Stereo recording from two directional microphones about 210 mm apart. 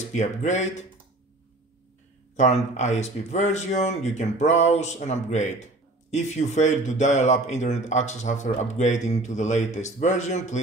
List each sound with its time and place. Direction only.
0.0 s speech: 35° left (ahead or behind)
2.3 s speech: 35° left (ahead or behind)